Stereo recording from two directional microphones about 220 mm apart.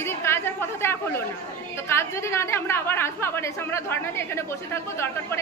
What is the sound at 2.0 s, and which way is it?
A woman's voice, 10° left (ahead or behind).